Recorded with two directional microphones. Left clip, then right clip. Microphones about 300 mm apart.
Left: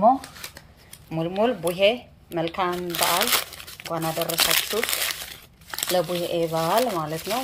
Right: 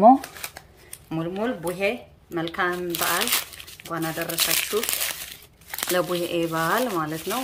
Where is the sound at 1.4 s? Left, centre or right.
Right.